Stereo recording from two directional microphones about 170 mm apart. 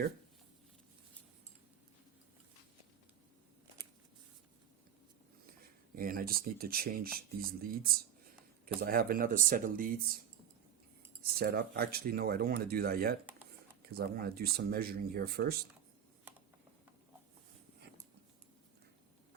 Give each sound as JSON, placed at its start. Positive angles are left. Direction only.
{"t": 6.0, "sound": "speech", "side_deg": -60}
{"t": 11.3, "sound": "speech", "side_deg": -65}